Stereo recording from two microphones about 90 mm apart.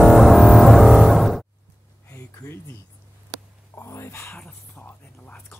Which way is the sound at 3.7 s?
30° left (ahead or behind).